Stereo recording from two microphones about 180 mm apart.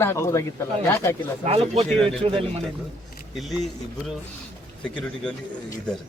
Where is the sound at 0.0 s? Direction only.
15° left (ahead or behind).